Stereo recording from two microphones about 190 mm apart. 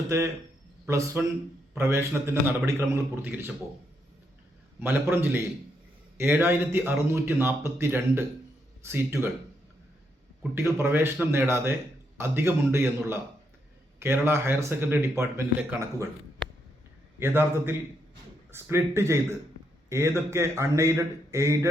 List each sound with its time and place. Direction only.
0.9 s a man's voice: 15° right (ahead or behind)
4.8 s a man's voice: 10° right (ahead or behind)
10.5 s a man's voice: 15° right (ahead or behind)
17.2 s a man's voice: 10° right (ahead or behind)